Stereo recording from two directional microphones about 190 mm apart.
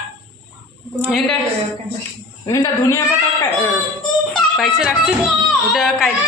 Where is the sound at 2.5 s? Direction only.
15° left (ahead or behind).